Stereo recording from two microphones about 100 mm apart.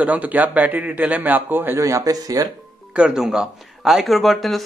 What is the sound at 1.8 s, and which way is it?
Speech, 35° right (ahead or behind).